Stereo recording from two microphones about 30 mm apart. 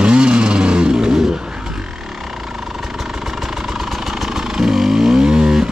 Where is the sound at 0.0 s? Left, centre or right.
Right.